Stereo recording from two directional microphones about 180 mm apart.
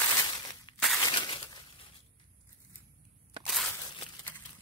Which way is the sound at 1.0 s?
25° left (ahead or behind).